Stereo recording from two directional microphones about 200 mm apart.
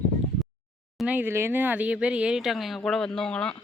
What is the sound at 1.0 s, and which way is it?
Speech, 10° right (ahead or behind).